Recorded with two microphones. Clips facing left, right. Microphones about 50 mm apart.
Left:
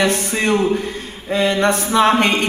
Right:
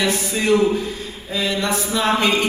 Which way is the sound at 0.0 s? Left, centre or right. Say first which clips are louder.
Left 3 dB; left.